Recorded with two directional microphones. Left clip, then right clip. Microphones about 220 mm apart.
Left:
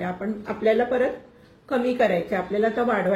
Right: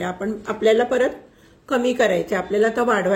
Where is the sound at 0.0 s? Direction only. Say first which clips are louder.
Right 4 dB; 50° right (ahead or behind).